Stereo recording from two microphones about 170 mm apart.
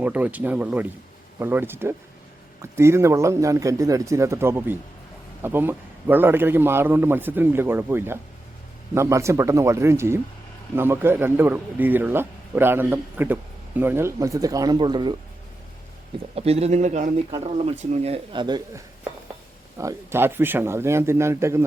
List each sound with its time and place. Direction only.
0.0 s a man's voice: 10° right (ahead or behind); by 15.1 s 25° right (ahead or behind)
16.3 s speech: 35° right (ahead or behind)
17.4 s speech: 35° right (ahead or behind)
18.4 s speech: 25° right (ahead or behind)
19.8 s a man's voice: 15° right (ahead or behind)